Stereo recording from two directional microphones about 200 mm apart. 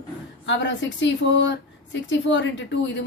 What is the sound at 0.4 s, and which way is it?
Speech, 65° left (ahead or behind).